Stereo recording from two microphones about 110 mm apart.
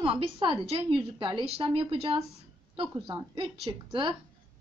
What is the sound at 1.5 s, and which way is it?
Speech, 60° right (ahead or behind).